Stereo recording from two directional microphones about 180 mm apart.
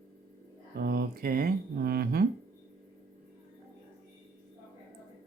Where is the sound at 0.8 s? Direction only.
65° right (ahead or behind).